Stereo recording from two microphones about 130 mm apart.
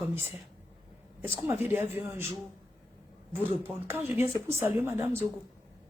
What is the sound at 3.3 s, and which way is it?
Speech, 15° right (ahead or behind).